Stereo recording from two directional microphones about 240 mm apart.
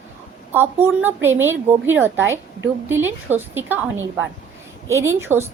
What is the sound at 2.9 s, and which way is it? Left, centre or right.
Speech, centre.